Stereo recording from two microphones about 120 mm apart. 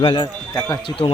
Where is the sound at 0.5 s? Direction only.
25° left (ahead or behind).